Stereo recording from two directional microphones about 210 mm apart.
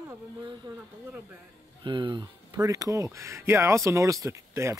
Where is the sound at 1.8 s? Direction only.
20° right (ahead or behind).